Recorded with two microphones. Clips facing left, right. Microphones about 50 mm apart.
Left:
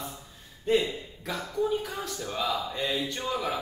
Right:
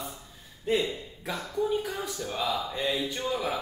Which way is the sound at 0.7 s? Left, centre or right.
Centre.